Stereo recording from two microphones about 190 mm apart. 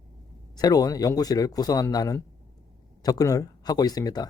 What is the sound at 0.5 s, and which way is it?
Speech, 20° left (ahead or behind).